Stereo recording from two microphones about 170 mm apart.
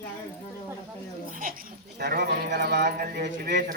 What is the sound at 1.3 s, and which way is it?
Speech, 55° right (ahead or behind).